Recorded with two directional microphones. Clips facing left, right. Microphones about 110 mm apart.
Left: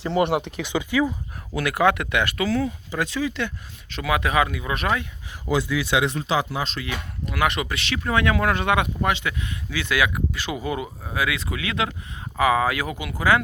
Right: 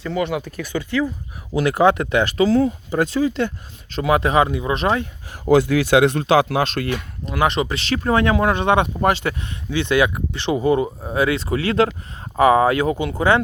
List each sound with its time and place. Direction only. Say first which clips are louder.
0.2 s speech: left 2 dB; 50° left (ahead or behind)
0.4 s speech: even; 15° left (ahead or behind)
1.5 s speech: right 5 dB; 30° right (ahead or behind)
5.3 s speech: right 8 dB; 55° right (ahead or behind)
7.3 s speech: right 4 dB; 30° right (ahead or behind)
9.0 s speech: right 5 dB; 40° right (ahead or behind)